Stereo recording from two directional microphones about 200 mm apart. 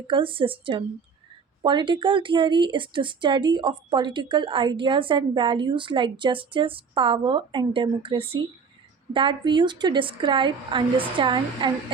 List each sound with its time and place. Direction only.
0.1 s a woman's voice: 25° right (ahead or behind)